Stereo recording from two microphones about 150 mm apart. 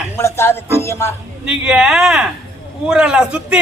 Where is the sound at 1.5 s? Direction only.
5° right (ahead or behind).